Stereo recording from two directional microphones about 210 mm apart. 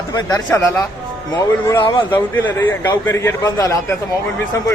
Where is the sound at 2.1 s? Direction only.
10° left (ahead or behind).